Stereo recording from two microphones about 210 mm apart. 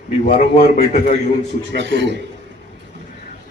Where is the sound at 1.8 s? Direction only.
55° right (ahead or behind).